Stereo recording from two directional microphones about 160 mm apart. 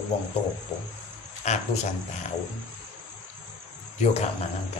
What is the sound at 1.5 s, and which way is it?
Speech, 45° left (ahead or behind).